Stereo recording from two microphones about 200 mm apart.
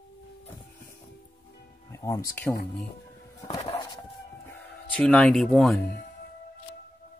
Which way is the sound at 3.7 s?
20° left (ahead or behind).